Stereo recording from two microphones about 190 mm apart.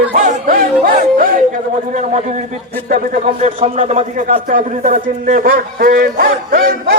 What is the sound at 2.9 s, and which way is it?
Speech, 45° right (ahead or behind).